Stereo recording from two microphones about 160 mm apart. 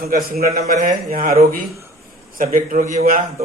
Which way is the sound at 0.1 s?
70° right (ahead or behind).